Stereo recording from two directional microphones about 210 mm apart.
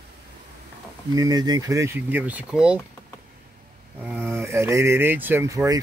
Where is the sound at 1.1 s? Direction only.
15° right (ahead or behind).